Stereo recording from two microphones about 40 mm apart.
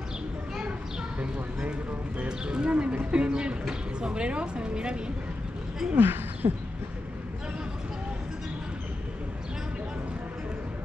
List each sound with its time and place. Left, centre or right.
1.2 s a sound: right
2.2 s speech: right
5.9 s speech: right